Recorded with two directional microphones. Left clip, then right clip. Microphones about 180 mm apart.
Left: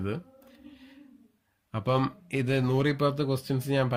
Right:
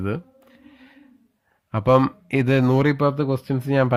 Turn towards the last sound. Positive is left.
turn(degrees=-40)  # may be behind; listen again after turning